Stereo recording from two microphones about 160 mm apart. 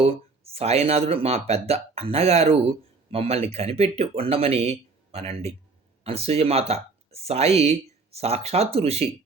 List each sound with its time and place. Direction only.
0.0 s speech: 40° right (ahead or behind)